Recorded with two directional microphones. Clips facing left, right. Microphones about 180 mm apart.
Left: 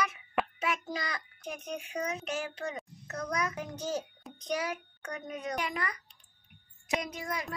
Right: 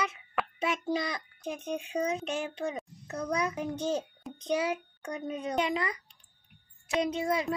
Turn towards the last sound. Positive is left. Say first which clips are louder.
# right 8 dB
turn(degrees=-25)  # may be behind; listen again after turning